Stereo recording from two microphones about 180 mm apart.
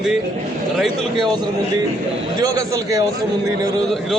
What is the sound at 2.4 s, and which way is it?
Speech, 20° right (ahead or behind).